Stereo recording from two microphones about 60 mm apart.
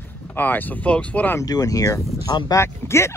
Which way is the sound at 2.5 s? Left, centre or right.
Left.